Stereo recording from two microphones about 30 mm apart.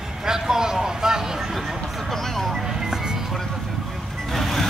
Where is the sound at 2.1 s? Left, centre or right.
Centre.